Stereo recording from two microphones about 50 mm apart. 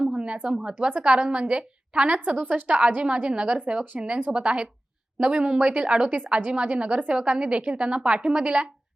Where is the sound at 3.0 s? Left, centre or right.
Right.